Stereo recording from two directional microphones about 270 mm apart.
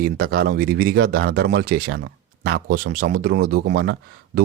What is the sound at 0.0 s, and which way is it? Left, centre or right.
Speech, right.